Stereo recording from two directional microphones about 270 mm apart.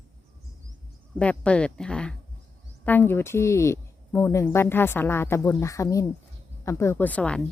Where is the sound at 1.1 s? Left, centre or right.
Centre.